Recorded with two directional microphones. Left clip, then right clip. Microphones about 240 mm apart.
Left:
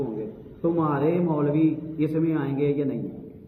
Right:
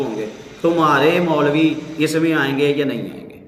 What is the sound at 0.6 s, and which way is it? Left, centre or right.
Speech, centre.